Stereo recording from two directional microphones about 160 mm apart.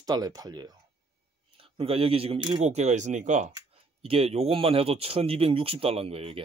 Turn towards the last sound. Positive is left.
turn(degrees=-40)  # may be behind; listen again after turning